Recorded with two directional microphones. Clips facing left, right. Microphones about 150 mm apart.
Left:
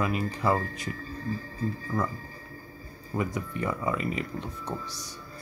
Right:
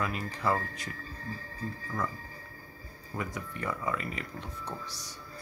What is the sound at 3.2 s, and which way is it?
Speech, 20° left (ahead or behind).